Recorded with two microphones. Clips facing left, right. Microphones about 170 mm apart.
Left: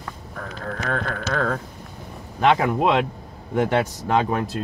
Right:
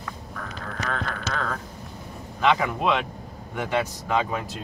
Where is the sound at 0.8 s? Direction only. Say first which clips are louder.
Left 4 dB; 50° left (ahead or behind).